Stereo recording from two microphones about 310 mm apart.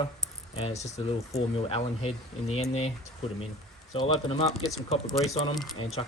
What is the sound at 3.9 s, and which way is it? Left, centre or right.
Speech, centre.